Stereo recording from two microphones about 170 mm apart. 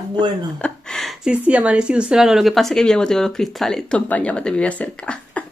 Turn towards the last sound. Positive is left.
turn(degrees=5)  # may be behind; listen again after turning